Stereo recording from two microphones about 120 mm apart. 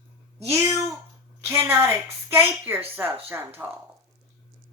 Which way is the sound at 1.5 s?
15° right (ahead or behind).